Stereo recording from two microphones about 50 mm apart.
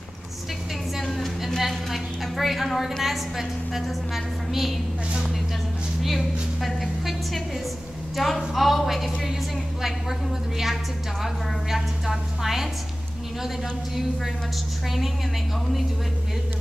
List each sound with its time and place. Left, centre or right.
0.9 s a sound: centre
6.0 s a woman's voice: centre
11.7 s a woman's voice: centre